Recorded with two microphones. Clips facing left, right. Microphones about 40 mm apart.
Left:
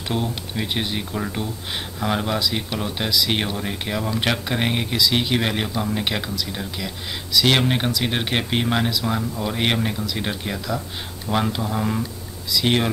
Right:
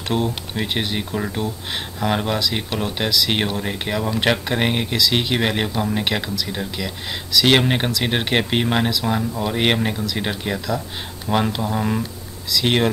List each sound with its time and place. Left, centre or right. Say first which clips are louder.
0.1 s speech: right 3 dB; right
0.9 s speech: right 2 dB; centre